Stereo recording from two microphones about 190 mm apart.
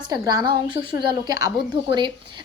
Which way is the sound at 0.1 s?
20° right (ahead or behind).